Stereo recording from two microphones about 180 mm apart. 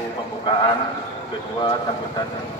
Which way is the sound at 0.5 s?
25° left (ahead or behind).